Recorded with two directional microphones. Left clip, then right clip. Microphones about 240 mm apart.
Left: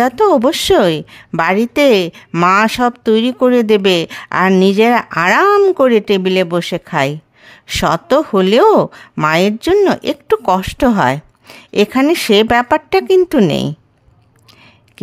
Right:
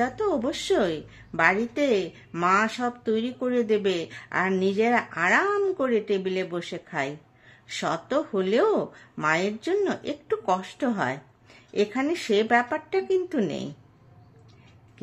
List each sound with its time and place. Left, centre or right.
0.0 s a woman's voice: left